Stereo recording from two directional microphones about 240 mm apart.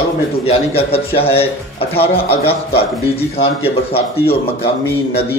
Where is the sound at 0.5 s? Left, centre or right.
Left.